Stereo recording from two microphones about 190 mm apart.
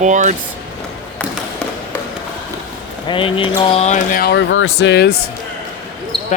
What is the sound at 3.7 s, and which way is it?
Music, 35° left (ahead or behind).